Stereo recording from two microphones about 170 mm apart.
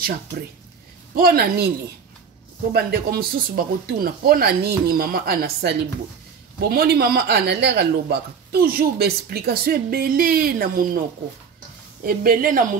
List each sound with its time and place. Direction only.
1.1 s speech: 65° right (ahead or behind)
2.7 s speech: 65° right (ahead or behind)
12.0 s speech: 60° right (ahead or behind)